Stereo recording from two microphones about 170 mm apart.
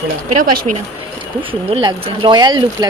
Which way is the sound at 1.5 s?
30° right (ahead or behind).